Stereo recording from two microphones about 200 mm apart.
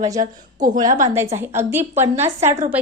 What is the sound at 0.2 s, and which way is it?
Speech, 40° right (ahead or behind).